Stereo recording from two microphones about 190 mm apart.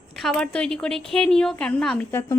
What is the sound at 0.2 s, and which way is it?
A woman's voice, centre (ahead or behind).